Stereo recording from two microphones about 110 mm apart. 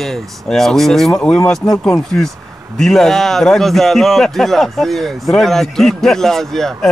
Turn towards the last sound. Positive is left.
turn(degrees=5)  # may be behind; listen again after turning